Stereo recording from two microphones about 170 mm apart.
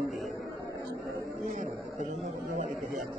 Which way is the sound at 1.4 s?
45° right (ahead or behind).